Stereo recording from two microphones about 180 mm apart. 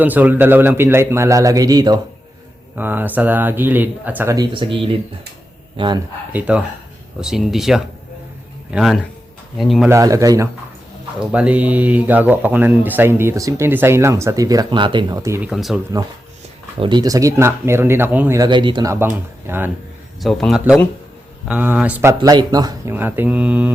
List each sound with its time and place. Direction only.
0.0 s speech: 10° right (ahead or behind)
2.7 s speech: 10° right (ahead or behind)
4.5 s a man's voice: 30° right (ahead or behind)
6.3 s speech: 5° right (ahead or behind)
9.9 s speech: 20° right (ahead or behind)
11.2 s speech: 5° right (ahead or behind)
15.4 s speech: 5° right (ahead or behind)
16.8 s speech: 25° right (ahead or behind)
20.2 s speech: centre (ahead or behind)
22.2 s speech: 20° right (ahead or behind)
23.0 s speech: 10° right (ahead or behind)